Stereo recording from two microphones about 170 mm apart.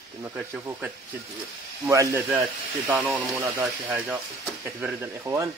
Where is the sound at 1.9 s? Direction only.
20° right (ahead or behind).